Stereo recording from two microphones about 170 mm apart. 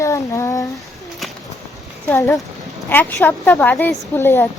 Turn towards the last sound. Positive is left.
turn(degrees=15)  # may be behind; listen again after turning